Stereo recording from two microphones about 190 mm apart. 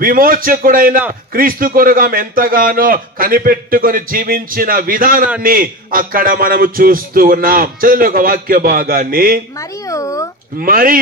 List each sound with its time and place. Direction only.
0.0 s a man's voice: 50° right (ahead or behind)
9.6 s speech: 15° left (ahead or behind)
10.6 s a man's voice: 50° right (ahead or behind)